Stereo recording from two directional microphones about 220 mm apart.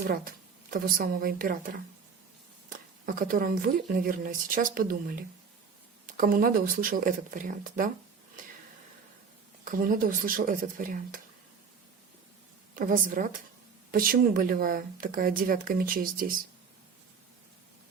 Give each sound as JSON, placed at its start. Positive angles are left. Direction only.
{"t": 0.7, "sound": "speech", "side_deg": -40}
{"t": 9.6, "sound": "speech", "side_deg": -40}
{"t": 12.7, "sound": "speech", "side_deg": -40}